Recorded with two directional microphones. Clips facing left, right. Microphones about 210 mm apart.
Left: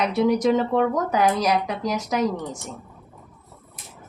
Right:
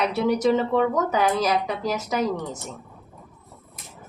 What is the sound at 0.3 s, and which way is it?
Speech, 5° right (ahead or behind).